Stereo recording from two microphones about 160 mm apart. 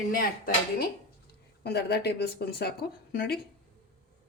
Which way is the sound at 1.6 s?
90° left.